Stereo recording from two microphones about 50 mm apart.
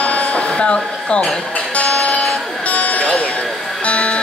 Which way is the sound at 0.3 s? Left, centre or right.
Centre.